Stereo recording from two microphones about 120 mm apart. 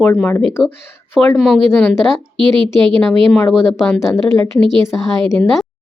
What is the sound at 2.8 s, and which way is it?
Speech, 45° right (ahead or behind).